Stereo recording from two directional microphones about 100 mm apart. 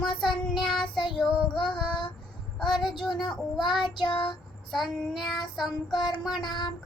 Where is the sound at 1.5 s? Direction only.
50° left (ahead or behind).